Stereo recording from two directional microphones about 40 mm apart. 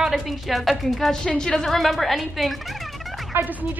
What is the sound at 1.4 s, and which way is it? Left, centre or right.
Speech, centre.